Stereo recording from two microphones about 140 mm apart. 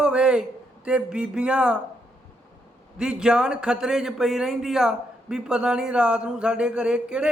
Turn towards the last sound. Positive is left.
turn(degrees=-5)  # may be behind; listen again after turning